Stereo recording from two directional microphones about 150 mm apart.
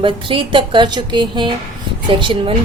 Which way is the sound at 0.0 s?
35° right (ahead or behind).